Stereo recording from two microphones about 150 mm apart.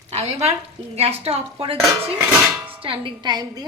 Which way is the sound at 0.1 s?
45° right (ahead or behind).